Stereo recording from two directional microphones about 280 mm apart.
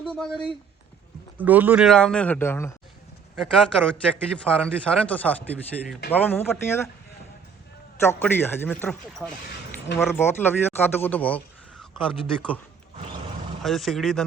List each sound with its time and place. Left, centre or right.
0.0 s a man's voice: centre
8.0 s a man's voice: centre
13.6 s a man's voice: centre